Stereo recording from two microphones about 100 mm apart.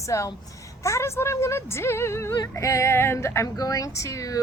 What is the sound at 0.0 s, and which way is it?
A woman's voice, 30° left (ahead or behind).